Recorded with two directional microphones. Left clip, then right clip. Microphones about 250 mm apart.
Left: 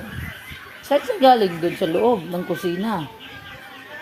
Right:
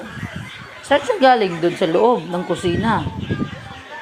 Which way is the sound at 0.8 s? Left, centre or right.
Centre.